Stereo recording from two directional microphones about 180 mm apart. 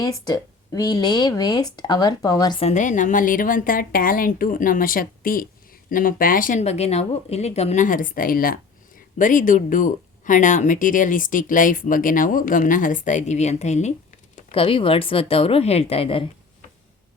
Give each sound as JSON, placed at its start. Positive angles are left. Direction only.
{"t": 0.0, "sound": "speech", "side_deg": 20}
{"t": 2.6, "sound": "a woman's voice", "side_deg": 40}